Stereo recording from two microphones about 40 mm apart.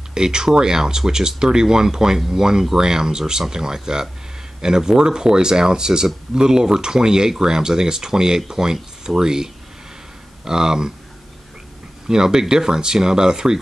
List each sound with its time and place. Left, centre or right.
0.1 s speech: centre
12.1 s speech: centre